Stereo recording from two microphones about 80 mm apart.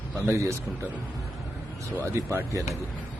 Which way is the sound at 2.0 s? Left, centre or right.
Right.